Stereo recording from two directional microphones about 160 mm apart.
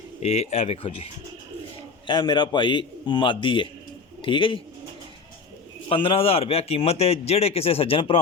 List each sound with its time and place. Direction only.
0.2 s a man's voice: 40° left (ahead or behind)
5.9 s a man's voice: 35° left (ahead or behind)